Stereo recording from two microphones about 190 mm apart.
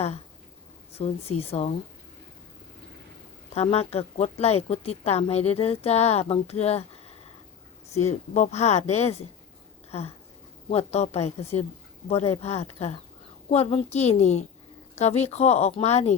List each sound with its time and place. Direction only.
0.9 s speech: 30° left (ahead or behind)
3.5 s speech: 30° left (ahead or behind)
7.9 s speech: 35° left (ahead or behind)
10.7 s speech: 35° left (ahead or behind)